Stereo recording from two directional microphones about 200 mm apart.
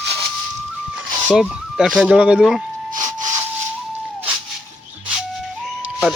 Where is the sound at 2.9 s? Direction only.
20° right (ahead or behind).